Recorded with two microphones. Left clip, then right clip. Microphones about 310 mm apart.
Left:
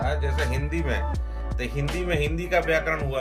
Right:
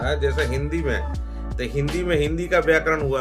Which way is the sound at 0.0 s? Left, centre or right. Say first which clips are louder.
Right 5 dB; centre.